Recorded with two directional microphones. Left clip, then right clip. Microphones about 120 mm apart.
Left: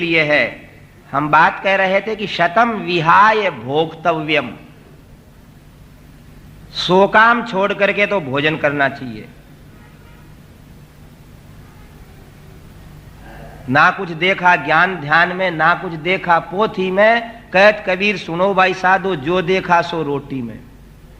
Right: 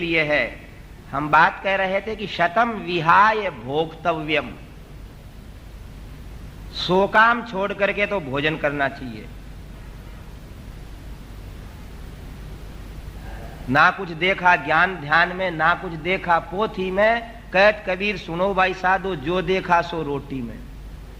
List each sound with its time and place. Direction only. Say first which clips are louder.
0.0 s a man's voice: left 6 dB; 25° right (ahead or behind)
6.7 s a man's voice: left 5 dB; 25° right (ahead or behind)
13.7 s a man's voice: left 4 dB; 25° right (ahead or behind)